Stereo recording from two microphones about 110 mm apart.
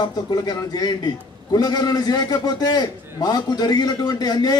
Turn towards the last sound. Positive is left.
turn(degrees=40)  # may be behind; listen again after turning